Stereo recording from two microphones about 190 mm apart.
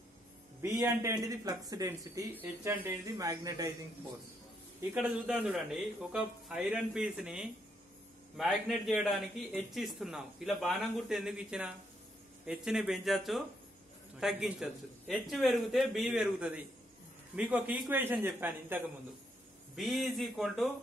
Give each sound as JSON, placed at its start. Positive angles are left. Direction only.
{"t": 0.6, "sound": "a man's voice", "side_deg": -15}
{"t": 4.9, "sound": "a man's voice", "side_deg": -10}